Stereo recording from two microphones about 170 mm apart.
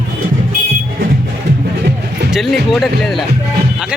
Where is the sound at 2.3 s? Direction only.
Centre (ahead or behind).